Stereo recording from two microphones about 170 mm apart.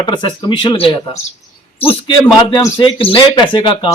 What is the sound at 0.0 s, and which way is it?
A man's voice, 30° left (ahead or behind).